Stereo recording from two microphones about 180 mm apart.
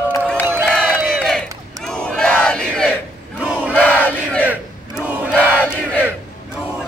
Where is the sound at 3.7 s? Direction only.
10° left (ahead or behind).